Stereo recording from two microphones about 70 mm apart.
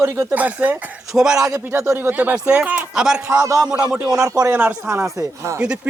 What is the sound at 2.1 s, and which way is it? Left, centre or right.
Speech, right.